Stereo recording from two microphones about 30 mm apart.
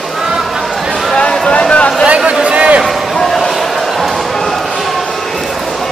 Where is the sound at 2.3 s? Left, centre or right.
Right.